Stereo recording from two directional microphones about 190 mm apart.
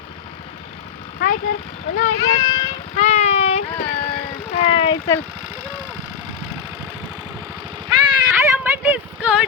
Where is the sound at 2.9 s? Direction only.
35° left (ahead or behind).